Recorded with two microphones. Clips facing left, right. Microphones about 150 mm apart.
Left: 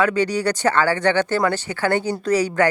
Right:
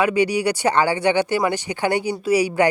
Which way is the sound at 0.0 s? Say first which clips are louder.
Right 1 dB; 15° right (ahead or behind).